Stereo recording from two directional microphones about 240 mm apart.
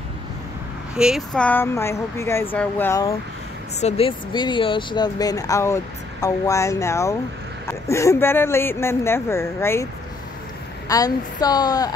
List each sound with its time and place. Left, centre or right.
0.9 s speech: centre
3.8 s speech: left
10.9 s speech: centre